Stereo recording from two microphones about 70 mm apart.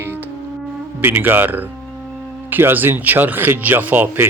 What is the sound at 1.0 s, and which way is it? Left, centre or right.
Speech, right.